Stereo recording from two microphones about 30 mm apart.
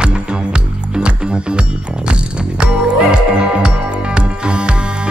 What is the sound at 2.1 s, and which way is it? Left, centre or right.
Music, right.